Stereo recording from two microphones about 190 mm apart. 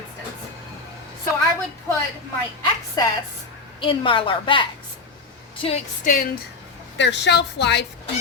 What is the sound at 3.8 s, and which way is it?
Speech, 25° left (ahead or behind).